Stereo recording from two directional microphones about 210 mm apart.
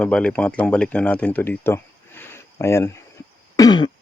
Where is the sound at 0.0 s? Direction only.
5° left (ahead or behind).